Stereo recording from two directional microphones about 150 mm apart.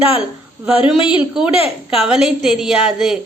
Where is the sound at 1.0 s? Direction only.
5° right (ahead or behind).